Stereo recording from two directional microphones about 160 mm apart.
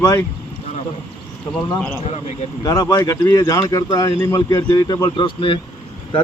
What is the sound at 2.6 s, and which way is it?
Speech, 25° left (ahead or behind).